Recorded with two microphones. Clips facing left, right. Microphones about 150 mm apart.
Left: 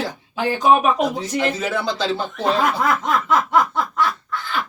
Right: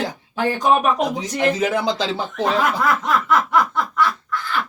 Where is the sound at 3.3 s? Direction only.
20° left (ahead or behind).